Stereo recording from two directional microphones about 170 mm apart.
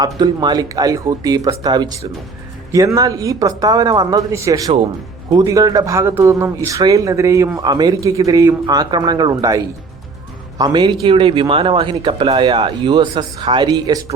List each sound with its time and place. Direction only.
0.0 s speech: 25° right (ahead or behind)
10.6 s speech: 25° right (ahead or behind)